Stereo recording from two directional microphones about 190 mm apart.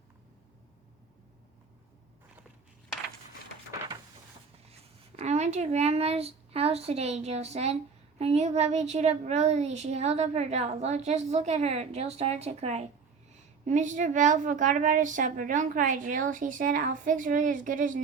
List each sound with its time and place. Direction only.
4.7 s a woman's voice: 30° right (ahead or behind)